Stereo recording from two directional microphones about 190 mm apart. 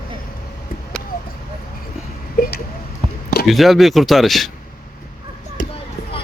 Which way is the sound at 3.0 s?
25° right (ahead or behind).